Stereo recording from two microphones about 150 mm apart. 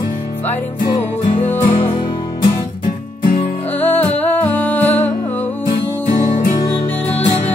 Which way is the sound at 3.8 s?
10° left (ahead or behind).